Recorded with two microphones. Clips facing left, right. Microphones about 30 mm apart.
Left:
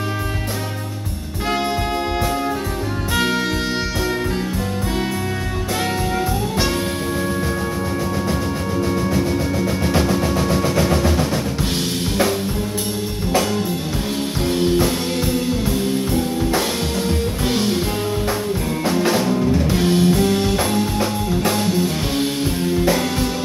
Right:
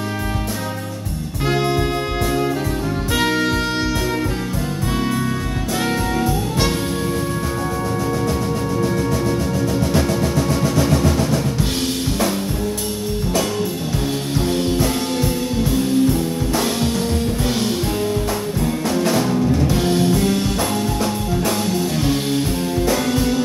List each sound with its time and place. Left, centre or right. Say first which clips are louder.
3.2 s music: right 1 dB; centre
8.8 s music: left 1 dB; centre
14.4 s music: left 3 dB; centre
16.1 s music: even; centre
18.9 s music: left 2 dB; centre
20.7 s music: left 1 dB; left
21.5 s music: left 2 dB; centre